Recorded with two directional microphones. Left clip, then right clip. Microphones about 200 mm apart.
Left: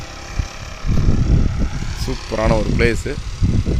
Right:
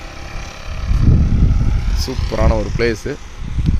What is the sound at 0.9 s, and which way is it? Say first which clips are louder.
Vehicle: right 1 dB; centre (ahead or behind).